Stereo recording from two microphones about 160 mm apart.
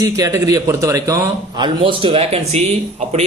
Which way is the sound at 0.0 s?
20° right (ahead or behind).